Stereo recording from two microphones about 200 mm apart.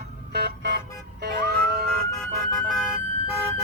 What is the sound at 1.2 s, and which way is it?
Music, 55° right (ahead or behind).